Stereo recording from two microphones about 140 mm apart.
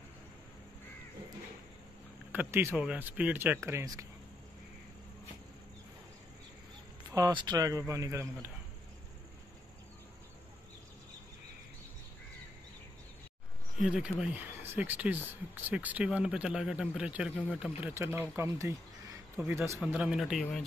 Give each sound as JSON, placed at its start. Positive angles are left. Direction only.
{"t": 2.3, "sound": "a man's voice", "side_deg": -15}
{"t": 7.2, "sound": "speech", "side_deg": -30}
{"t": 13.7, "sound": "speech", "side_deg": -5}
{"t": 14.4, "sound": "a man's voice", "side_deg": -15}
{"t": 19.9, "sound": "speech", "side_deg": -5}